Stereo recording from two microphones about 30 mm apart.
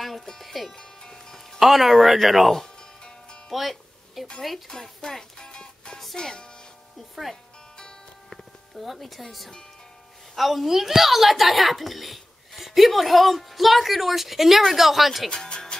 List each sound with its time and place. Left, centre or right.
0.0 s music: centre
0.7 s music: left
1.6 s a woman's voice: centre
3.5 s music: centre
4.6 s speech: centre
8.7 s a woman's voice: centre
15.2 s speech: left